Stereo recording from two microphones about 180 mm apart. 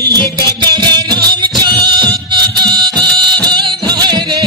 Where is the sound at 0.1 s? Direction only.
20° right (ahead or behind).